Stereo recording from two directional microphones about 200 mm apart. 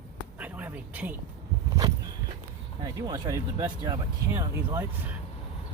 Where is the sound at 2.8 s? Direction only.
15° right (ahead or behind).